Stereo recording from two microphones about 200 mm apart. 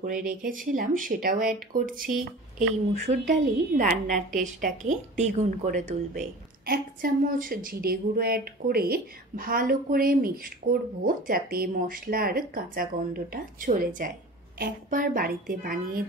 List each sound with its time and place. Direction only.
0.0 s a woman's voice: 40° right (ahead or behind)